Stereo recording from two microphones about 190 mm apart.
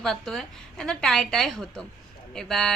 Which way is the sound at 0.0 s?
Centre (ahead or behind).